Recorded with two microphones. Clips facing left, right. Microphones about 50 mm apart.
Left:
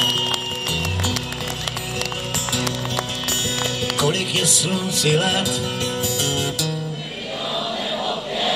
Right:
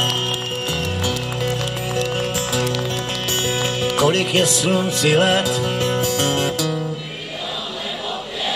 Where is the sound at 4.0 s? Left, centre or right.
Right.